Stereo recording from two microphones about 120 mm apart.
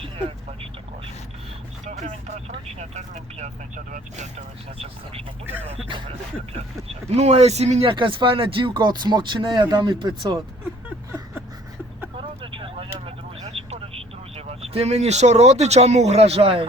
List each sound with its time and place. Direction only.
0.0 s speech: 50° right (ahead or behind)
1.8 s speech: 85° right
6.1 s speech: 60° right (ahead or behind)
7.9 s speech: 45° right (ahead or behind)
12.2 s a sound: 45° right (ahead or behind)
13.4 s vehicle: 55° right (ahead or behind)